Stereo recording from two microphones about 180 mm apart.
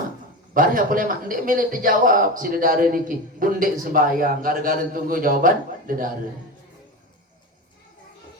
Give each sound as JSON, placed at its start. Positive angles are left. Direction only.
{"t": 0.5, "sound": "a man's voice", "side_deg": -50}